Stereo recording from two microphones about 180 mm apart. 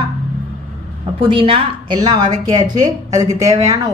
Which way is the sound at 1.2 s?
30° right (ahead or behind).